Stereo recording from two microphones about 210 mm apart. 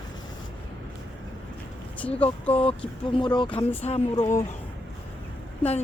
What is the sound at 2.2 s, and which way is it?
Speech, 30° left (ahead or behind).